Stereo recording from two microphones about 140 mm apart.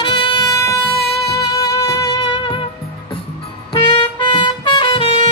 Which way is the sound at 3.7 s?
35° left (ahead or behind).